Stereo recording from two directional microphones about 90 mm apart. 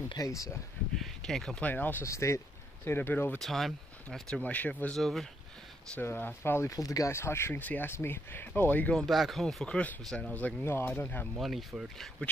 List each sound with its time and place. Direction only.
0.2 s speech: 40° left (ahead or behind)
0.9 s speech: 5° left (ahead or behind)
1.6 s speech: 20° left (ahead or behind)
2.0 s speech: 30° left (ahead or behind)
3.3 s speech: centre (ahead or behind)
4.4 s speech: 15° left (ahead or behind)
4.9 s speech: 5° left (ahead or behind)
5.9 s speech: 20° left (ahead or behind)
6.7 s speech: 40° left (ahead or behind)
7.1 s speech: 30° left (ahead or behind)
8.9 s speech: centre (ahead or behind)
10.3 s speech: 20° left (ahead or behind)
11.3 s speech: 5° right (ahead or behind)
12.2 s speech: 15° left (ahead or behind)